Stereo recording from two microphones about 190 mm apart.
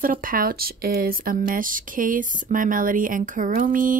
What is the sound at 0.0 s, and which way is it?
Speech, 50° right (ahead or behind).